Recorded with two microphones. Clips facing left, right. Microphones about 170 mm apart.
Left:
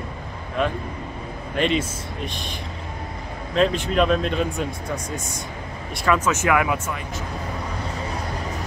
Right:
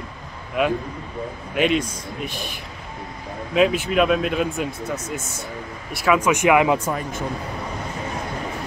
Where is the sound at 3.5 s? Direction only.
10° right (ahead or behind).